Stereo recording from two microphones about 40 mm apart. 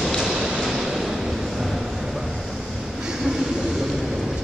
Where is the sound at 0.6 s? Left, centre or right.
Centre.